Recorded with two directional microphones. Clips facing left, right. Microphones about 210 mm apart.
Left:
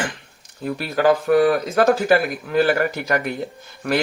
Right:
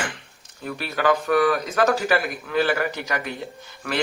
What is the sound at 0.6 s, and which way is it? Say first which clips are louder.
Speech: left 5 dB; 35° left (ahead or behind).